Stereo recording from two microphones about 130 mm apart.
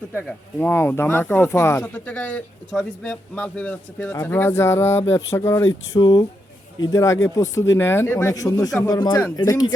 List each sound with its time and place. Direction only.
0.6 s speech: 15° left (ahead or behind)
6.0 s speech: 30° left (ahead or behind)